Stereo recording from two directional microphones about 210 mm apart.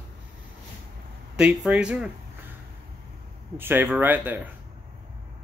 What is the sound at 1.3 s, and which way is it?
Speech, 5° right (ahead or behind).